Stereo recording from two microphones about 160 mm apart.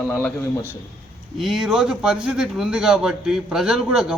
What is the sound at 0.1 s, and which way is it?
Speech, 10° left (ahead or behind).